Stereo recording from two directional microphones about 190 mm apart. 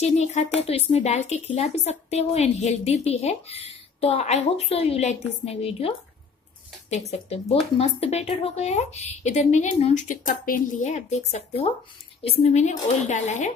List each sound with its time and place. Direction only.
0.0 s a woman's voice: 35° left (ahead or behind)